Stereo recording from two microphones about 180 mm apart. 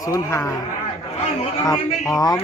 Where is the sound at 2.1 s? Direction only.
20° left (ahead or behind).